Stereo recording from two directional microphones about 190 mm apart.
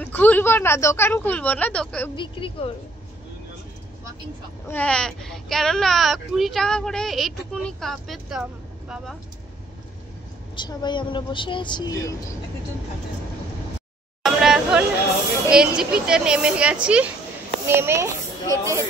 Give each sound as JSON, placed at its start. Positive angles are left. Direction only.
{"t": 0.0, "sound": "speech", "side_deg": 10}
{"t": 2.1, "sound": "speech", "side_deg": 25}
{"t": 4.6, "sound": "speech", "side_deg": 5}
{"t": 10.5, "sound": "speech", "side_deg": 25}
{"t": 14.2, "sound": "a sound", "side_deg": -5}
{"t": 15.5, "sound": "a child's voice", "side_deg": -5}